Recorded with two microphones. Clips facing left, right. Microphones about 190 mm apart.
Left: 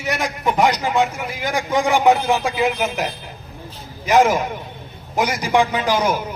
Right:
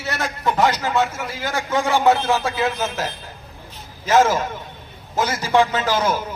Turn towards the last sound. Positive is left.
turn(degrees=15)  # may be behind; listen again after turning